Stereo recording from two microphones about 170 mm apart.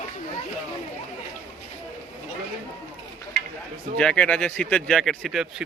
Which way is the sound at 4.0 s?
5° left (ahead or behind).